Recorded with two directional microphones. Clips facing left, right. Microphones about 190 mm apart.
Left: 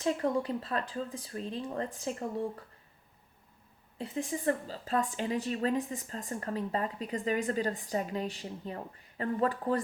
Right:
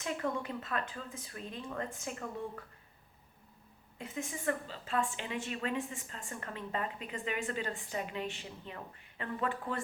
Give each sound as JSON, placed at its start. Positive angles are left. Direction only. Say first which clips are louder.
{"t": 0.0, "sound": "speech", "louder": "left 6 dB", "side_deg": 35}
{"t": 3.9, "sound": "speech", "louder": "left 6 dB", "side_deg": 35}